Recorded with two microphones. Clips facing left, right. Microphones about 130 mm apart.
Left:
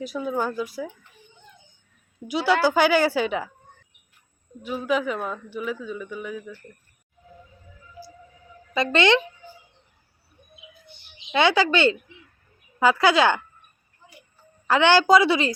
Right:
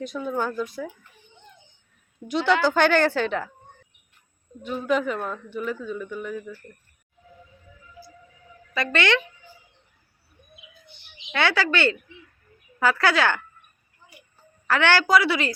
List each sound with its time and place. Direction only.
0.0 s a woman's voice: 5° left (ahead or behind)
2.2 s a woman's voice: 10° left (ahead or behind)
4.6 s a woman's voice: 5° left (ahead or behind)
8.7 s a woman's voice: 20° left (ahead or behind)
11.3 s a woman's voice: 15° left (ahead or behind)
14.7 s a woman's voice: 20° left (ahead or behind)